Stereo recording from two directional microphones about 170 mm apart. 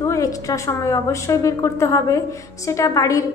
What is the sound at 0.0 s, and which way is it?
A woman's voice, 20° left (ahead or behind).